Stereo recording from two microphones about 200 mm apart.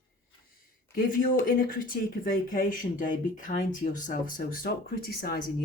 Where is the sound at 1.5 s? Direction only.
45° left (ahead or behind).